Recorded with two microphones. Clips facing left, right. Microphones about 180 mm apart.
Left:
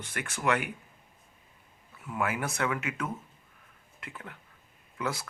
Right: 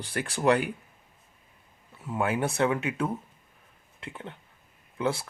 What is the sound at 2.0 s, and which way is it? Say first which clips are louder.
Speech: right 4 dB; 30° right (ahead or behind).